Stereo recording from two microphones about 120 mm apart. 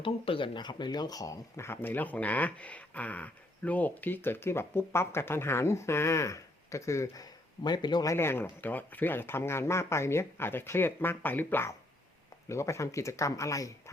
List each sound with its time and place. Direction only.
0.0 s speech: 45° left (ahead or behind)
8.1 s speech: 20° left (ahead or behind)